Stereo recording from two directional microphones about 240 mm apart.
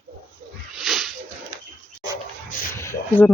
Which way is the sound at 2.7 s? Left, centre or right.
Centre.